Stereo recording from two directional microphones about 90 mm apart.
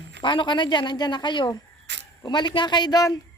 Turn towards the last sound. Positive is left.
turn(degrees=45)  # may be behind; listen again after turning